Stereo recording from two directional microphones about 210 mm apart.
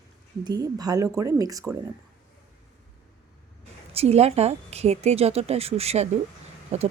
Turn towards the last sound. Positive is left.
turn(degrees=-30)  # may be behind; listen again after turning